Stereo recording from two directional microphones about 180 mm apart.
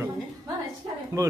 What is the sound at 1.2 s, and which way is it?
Speech, 20° right (ahead or behind).